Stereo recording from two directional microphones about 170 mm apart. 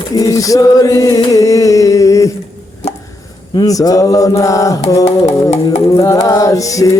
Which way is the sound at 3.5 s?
20° left (ahead or behind).